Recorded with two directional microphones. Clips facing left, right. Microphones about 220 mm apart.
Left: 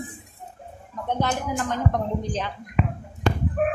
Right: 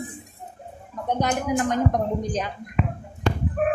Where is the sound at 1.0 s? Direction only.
15° right (ahead or behind).